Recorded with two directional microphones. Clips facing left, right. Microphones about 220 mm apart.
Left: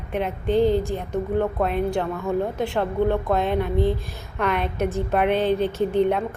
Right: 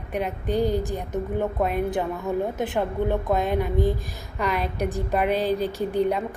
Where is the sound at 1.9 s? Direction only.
15° right (ahead or behind).